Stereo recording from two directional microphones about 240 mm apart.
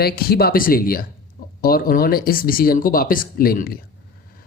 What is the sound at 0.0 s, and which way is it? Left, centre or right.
Speech, left.